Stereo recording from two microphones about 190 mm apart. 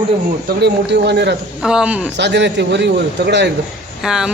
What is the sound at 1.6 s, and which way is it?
Speech, 5° right (ahead or behind).